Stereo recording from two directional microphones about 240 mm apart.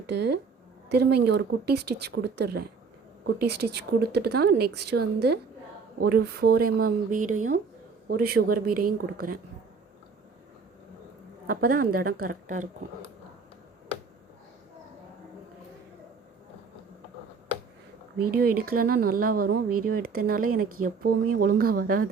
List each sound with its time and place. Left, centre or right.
0.1 s speech: right
11.4 s speech: right
18.2 s speech: right